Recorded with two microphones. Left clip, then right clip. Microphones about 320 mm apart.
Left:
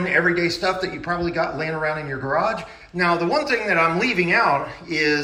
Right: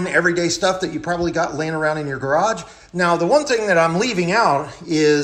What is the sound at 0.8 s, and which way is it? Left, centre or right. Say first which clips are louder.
Speech: right 2 dB; right.